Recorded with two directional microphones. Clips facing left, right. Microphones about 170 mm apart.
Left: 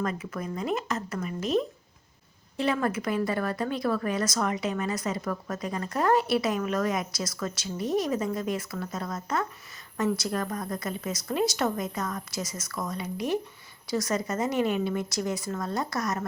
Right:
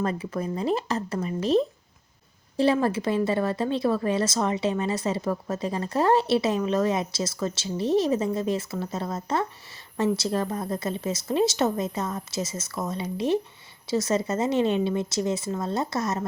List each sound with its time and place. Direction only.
0.0 s speech: 30° right (ahead or behind)
2.7 s a woman's voice: 30° right (ahead or behind)